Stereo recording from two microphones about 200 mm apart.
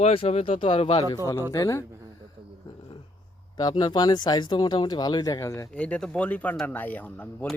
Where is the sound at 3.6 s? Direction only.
20° left (ahead or behind).